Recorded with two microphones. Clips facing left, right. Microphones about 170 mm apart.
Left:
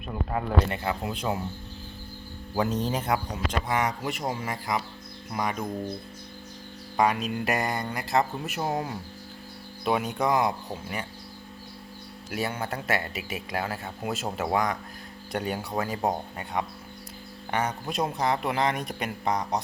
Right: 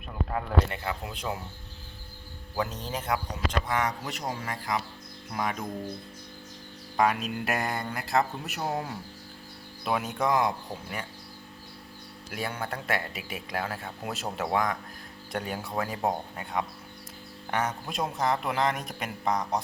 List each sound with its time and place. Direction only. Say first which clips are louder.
0.1 s speech: left 2 dB; 10° left (ahead or behind)
0.7 s speech: left 4 dB; 25° left (ahead or behind)
2.6 s speech: left 5 dB; 25° left (ahead or behind)
3.7 s speech: left 2 dB; 15° left (ahead or behind)
6.9 s speech: left 1 dB; centre (ahead or behind)
12.3 s speech: left 3 dB; 5° left (ahead or behind)